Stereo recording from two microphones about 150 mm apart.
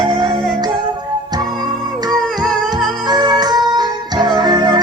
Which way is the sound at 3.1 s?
25° right (ahead or behind).